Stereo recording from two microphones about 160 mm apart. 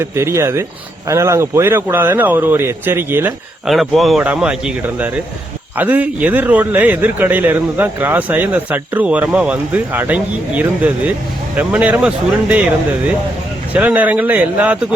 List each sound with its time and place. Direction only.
0.0 s a man's voice: 15° right (ahead or behind)
3.7 s a man's voice: centre (ahead or behind)
13.7 s a man's voice: 10° right (ahead or behind)